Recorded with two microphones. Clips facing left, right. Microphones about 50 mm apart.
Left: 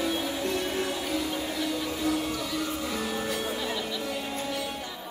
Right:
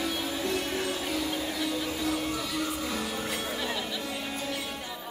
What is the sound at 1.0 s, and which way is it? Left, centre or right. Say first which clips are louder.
Music: left 1 dB; centre.